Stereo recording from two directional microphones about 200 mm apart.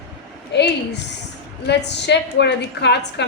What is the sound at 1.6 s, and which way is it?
A woman's voice, 60° left (ahead or behind).